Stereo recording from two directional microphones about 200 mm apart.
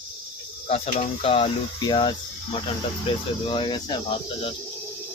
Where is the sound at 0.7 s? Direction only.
30° left (ahead or behind).